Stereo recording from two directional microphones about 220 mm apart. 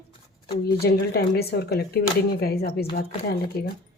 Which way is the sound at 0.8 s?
45° left (ahead or behind).